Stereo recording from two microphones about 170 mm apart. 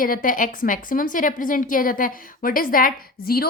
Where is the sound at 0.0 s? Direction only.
50° left (ahead or behind).